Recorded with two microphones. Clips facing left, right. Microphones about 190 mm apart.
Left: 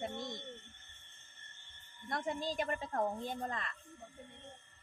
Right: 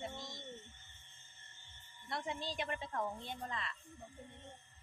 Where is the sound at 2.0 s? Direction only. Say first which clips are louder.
Left 4 dB; 45° left (ahead or behind).